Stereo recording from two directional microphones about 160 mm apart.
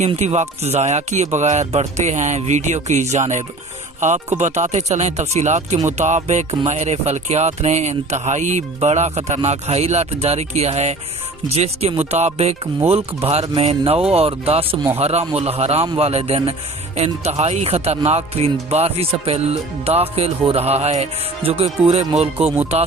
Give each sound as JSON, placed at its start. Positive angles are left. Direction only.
{"t": 0.0, "sound": "speech", "side_deg": -45}
{"t": 13.6, "sound": "speech", "side_deg": -40}